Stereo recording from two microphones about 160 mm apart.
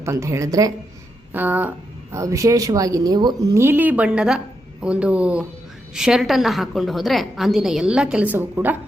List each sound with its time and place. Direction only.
0.0 s a woman's voice: 15° right (ahead or behind)
3.6 s a woman's voice: 10° right (ahead or behind)